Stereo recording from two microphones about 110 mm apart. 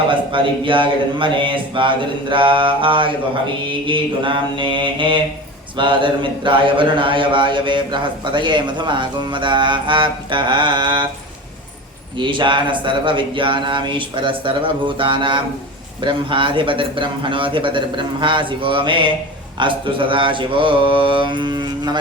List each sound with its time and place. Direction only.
0.1 s speech: 50° right (ahead or behind)
12.2 s speech: 45° right (ahead or behind)